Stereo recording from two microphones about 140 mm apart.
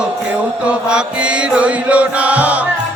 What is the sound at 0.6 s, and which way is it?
Mantra, 5° right (ahead or behind).